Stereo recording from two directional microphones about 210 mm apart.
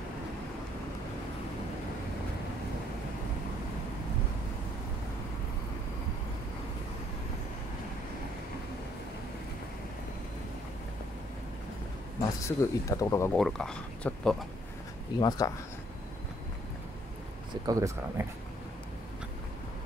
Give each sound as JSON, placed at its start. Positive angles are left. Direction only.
{"t": 12.2, "sound": "speech", "side_deg": 15}
{"t": 13.4, "sound": "speech", "side_deg": 0}
{"t": 15.1, "sound": "speech", "side_deg": 20}
{"t": 17.6, "sound": "speech", "side_deg": -15}